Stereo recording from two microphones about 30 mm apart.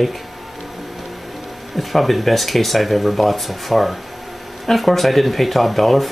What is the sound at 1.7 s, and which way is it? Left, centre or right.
Speech, centre.